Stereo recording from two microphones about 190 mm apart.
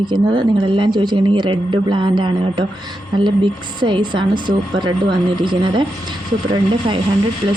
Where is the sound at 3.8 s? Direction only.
25° right (ahead or behind).